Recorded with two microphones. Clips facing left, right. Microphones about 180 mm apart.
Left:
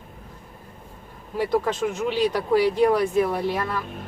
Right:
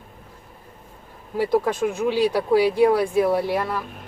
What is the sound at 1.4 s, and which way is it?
Speech, 10° right (ahead or behind).